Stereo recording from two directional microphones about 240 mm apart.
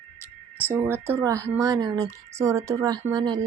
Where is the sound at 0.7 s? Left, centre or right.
Centre.